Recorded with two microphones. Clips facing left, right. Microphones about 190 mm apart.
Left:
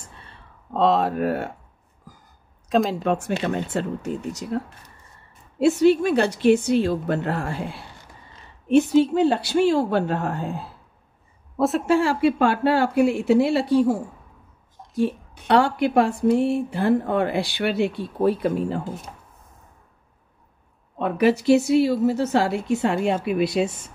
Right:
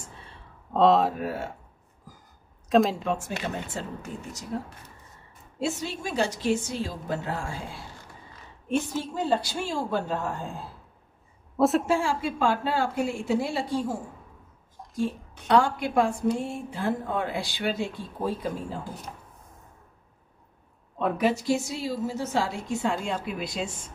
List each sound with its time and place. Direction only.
0.7 s speech: centre (ahead or behind)
1.1 s a woman's voice: 60° left (ahead or behind)
2.7 s speech: centre (ahead or behind)
3.0 s a woman's voice: 65° left (ahead or behind)
5.6 s a woman's voice: 65° left (ahead or behind)
11.5 s a woman's voice: centre (ahead or behind)
11.9 s a woman's voice: 65° left (ahead or behind)
15.0 s a woman's voice: 70° left (ahead or behind)
21.2 s a woman's voice: 65° left (ahead or behind)